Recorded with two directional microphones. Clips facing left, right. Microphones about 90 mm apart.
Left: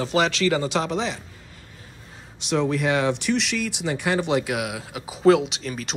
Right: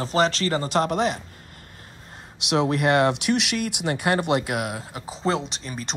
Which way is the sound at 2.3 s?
70° right (ahead or behind).